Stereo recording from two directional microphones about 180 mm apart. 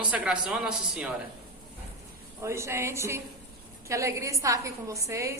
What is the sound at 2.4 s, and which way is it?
A woman's voice, 15° right (ahead or behind).